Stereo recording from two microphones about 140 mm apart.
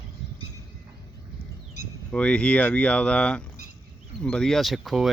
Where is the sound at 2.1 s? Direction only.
5° left (ahead or behind).